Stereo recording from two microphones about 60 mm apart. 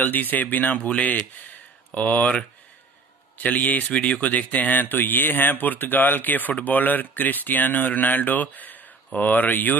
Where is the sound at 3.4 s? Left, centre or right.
Left.